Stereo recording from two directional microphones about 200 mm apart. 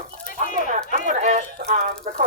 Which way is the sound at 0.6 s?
40° right (ahead or behind).